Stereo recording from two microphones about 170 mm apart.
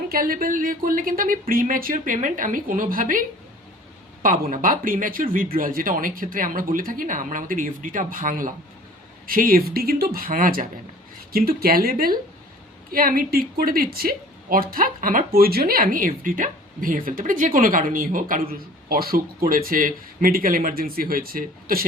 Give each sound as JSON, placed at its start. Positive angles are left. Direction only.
{"t": 0.1, "sound": "speech", "side_deg": -60}
{"t": 4.5, "sound": "speech", "side_deg": -55}